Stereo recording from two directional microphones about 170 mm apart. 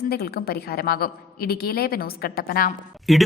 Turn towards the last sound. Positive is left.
turn(degrees=0)  # may be behind; listen again after turning